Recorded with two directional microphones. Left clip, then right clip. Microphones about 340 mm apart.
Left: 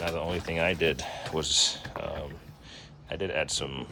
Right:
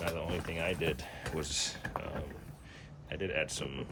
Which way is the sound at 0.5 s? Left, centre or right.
Centre.